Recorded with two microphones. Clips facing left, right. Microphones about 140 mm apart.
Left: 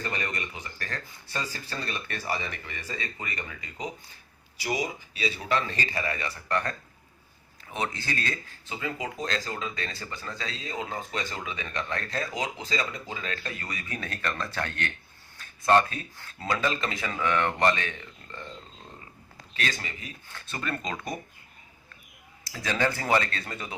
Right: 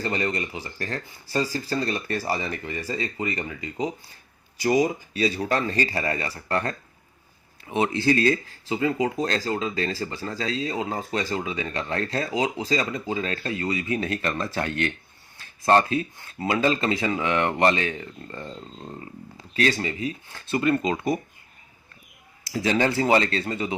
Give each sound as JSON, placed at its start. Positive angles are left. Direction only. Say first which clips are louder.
{"t": 0.0, "sound": "speech", "louder": "right 7 dB", "side_deg": -30}
{"t": 4.6, "sound": "speech", "louder": "right 9 dB", "side_deg": -45}
{"t": 15.4, "sound": "a sound", "louder": "right 2 dB", "side_deg": -35}
{"t": 16.6, "sound": "speech", "louder": "right 7 dB", "side_deg": -30}
{"t": 19.5, "sound": "speech", "louder": "right 10 dB", "side_deg": -35}
{"t": 20.6, "sound": "speech", "louder": "right 10 dB", "side_deg": -20}
{"t": 22.5, "sound": "speech", "louder": "right 6 dB", "side_deg": -25}